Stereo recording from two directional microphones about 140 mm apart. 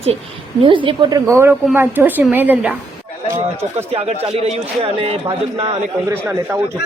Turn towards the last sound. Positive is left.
turn(degrees=-15)  # may be behind; listen again after turning